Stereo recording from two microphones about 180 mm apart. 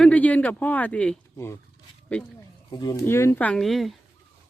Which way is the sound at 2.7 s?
25° left (ahead or behind).